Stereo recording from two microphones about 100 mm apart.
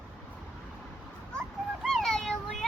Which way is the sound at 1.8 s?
5° left (ahead or behind).